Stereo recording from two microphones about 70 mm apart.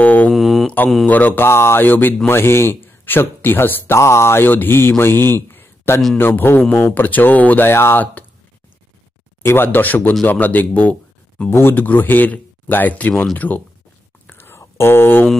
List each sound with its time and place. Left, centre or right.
0.0 s mantra: left
0.3 s mantra: centre
1.0 s speech: left
4.0 s speech: left
8.0 s a sound: left
9.4 s speech: left
11.5 s speech: left
14.2 s whispering: left
14.6 s speech: left